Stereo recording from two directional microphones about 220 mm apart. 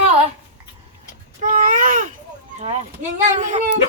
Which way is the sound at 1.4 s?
35° right (ahead or behind).